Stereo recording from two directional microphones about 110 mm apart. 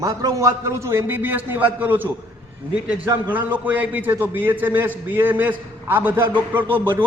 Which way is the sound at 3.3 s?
15° right (ahead or behind).